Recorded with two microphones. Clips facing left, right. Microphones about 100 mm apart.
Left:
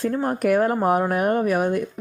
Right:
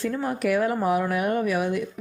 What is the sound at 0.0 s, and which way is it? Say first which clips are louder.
Speech: left 4 dB; 45° left (ahead or behind).